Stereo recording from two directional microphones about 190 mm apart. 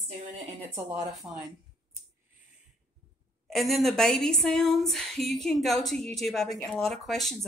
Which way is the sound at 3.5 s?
Centre (ahead or behind).